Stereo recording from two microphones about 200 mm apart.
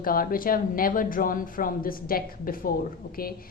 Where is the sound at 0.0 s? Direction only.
45° left (ahead or behind).